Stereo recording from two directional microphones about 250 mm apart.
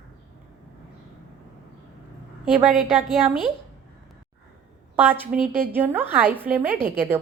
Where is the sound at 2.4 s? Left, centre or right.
Centre.